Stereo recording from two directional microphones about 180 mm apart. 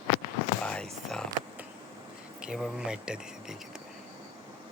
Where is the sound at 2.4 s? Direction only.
5° right (ahead or behind).